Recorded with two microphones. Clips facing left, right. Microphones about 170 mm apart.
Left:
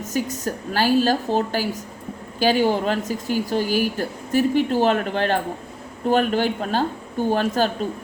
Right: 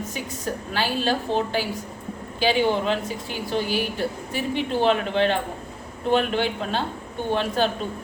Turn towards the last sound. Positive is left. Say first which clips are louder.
# left 3 dB
turn(degrees=45)  # may be behind; listen again after turning